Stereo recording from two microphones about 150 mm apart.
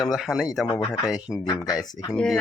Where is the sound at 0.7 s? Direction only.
25° left (ahead or behind).